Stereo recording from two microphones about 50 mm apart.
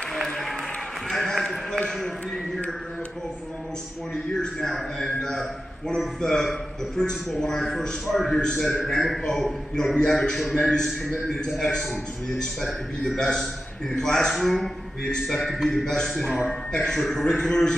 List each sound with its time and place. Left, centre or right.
0.1 s applause: centre
1.0 s a sound: centre
1.9 s a man's voice: centre
4.1 s a man's voice: centre
11.2 s a man's voice: centre
11.6 s a man's voice: centre
16.9 s a man's voice: centre